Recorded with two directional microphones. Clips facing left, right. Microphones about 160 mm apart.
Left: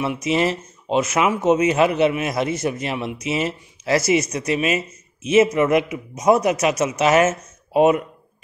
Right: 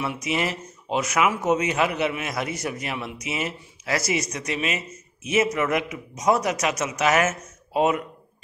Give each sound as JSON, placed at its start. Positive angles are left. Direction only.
{"t": 0.0, "sound": "speech", "side_deg": 25}